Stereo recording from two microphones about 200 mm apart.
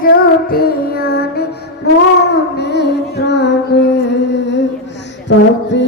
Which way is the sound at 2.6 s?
55° left (ahead or behind).